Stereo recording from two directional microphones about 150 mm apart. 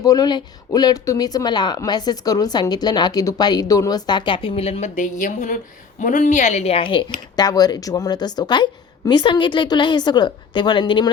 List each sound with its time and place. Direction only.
0.0 s speech: 25° left (ahead or behind)